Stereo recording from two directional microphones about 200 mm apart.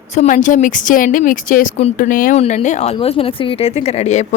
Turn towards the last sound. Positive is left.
turn(degrees=35)  # may be behind; listen again after turning